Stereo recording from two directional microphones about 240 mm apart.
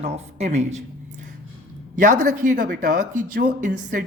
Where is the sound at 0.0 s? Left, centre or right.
Right.